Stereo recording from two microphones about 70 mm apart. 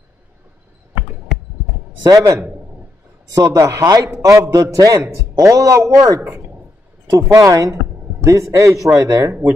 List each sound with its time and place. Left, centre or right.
2.0 s a man's voice: right
3.4 s a man's voice: right